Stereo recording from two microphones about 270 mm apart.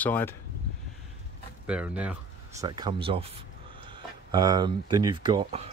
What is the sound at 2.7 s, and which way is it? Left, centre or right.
Speech, centre.